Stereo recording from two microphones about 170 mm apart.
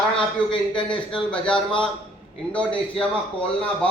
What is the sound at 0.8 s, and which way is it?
Speech, 30° left (ahead or behind).